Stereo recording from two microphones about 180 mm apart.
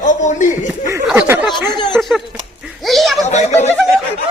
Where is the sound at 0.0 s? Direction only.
40° left (ahead or behind).